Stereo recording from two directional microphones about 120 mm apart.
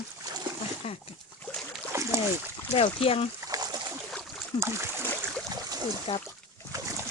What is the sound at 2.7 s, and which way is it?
Speech, 50° left (ahead or behind).